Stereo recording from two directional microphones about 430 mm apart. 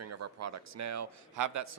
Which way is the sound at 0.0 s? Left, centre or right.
Right.